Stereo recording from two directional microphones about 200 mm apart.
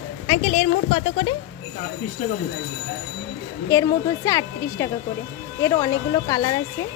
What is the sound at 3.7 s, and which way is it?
A woman's voice, 15° left (ahead or behind).